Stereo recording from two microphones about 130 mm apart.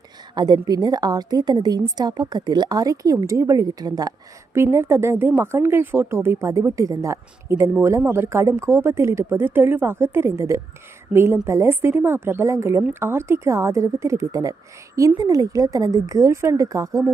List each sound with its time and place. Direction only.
0.3 s a woman's voice: 30° right (ahead or behind)